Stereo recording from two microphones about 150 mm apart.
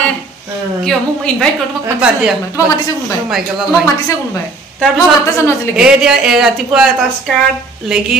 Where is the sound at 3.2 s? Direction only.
Centre (ahead or behind).